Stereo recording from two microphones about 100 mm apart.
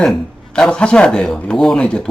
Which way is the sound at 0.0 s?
5° left (ahead or behind).